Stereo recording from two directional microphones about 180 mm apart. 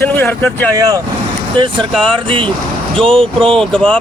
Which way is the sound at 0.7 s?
20° right (ahead or behind).